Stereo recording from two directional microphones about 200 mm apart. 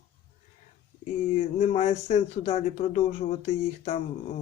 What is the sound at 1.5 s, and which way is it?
A man's voice, 35° left (ahead or behind).